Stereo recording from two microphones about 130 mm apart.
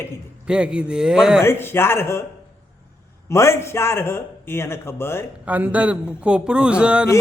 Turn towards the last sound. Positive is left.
turn(degrees=-10)  # may be behind; listen again after turning